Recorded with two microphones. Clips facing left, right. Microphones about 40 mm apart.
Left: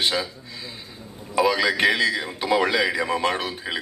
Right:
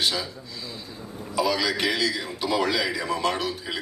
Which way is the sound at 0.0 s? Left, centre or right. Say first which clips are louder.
Left 3 dB; left.